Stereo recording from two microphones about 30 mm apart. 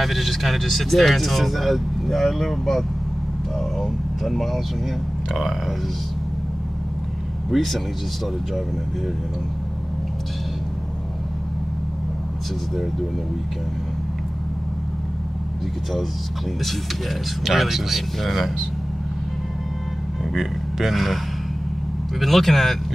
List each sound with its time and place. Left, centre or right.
0.0 s speech: centre
4.2 s speech: centre
7.5 s speech: centre
17.5 s speech: centre
18.2 s speech: centre
20.3 s speech: centre
22.2 s speech: centre